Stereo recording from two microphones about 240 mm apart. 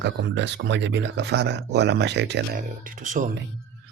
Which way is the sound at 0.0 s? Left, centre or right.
Right.